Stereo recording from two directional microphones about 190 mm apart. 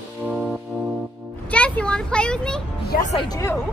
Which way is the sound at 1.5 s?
5° left (ahead or behind).